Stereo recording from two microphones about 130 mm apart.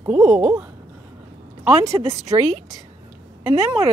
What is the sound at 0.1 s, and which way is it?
Speech, 10° right (ahead or behind).